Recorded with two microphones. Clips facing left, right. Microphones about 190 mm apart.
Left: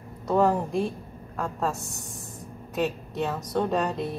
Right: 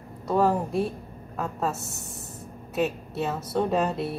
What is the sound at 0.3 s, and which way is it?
A woman's voice, 5° right (ahead or behind).